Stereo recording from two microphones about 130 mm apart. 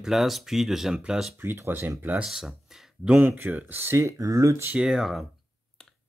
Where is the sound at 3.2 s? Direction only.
15° right (ahead or behind).